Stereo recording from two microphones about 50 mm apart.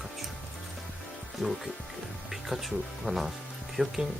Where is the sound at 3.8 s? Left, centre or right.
Centre.